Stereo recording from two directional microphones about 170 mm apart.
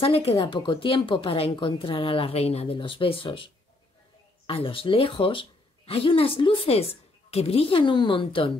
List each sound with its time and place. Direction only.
0.0 s a woman's voice: 35° left (ahead or behind)